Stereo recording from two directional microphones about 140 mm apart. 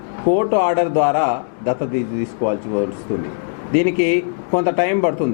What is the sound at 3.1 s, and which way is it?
Speech, 15° left (ahead or behind).